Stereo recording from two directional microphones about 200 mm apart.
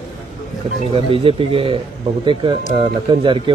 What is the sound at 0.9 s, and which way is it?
Speech, 25° right (ahead or behind).